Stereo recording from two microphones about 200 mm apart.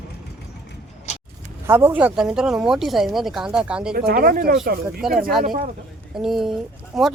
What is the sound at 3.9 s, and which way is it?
Speech, 50° right (ahead or behind).